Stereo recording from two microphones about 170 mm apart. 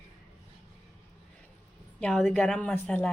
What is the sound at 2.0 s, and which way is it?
A woman's voice, 5° left (ahead or behind).